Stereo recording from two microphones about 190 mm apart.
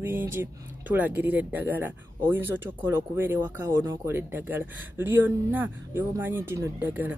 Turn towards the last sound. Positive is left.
turn(degrees=-10)  # may be behind; listen again after turning